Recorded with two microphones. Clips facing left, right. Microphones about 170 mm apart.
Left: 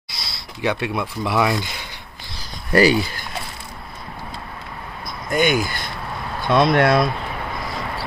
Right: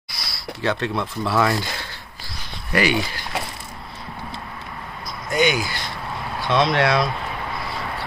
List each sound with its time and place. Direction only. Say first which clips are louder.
0.1 s speech: right 3 dB; 20° left (ahead or behind)
2.7 s speech: left 5 dB; 40° left (ahead or behind)
5.3 s speech: left 1 dB; 50° left (ahead or behind)